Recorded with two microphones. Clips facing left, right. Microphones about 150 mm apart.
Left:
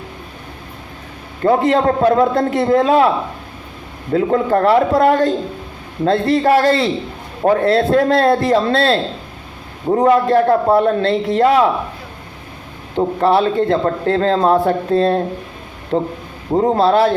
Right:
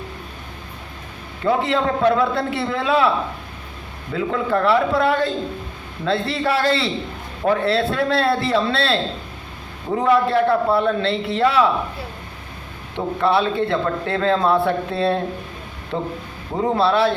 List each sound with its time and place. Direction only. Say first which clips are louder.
1.5 s a man's voice: left 6 dB; 45° left (ahead or behind)
4.1 s a man's voice: left 6 dB; 40° left (ahead or behind)
13.0 s a man's voice: left 5 dB; 40° left (ahead or behind)
16.7 s a man's voice: left 3 dB; 45° left (ahead or behind)